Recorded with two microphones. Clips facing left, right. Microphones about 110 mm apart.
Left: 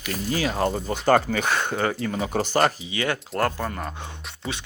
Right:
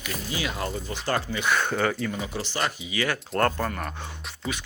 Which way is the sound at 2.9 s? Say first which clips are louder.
Left 1 dB; 25° left (ahead or behind).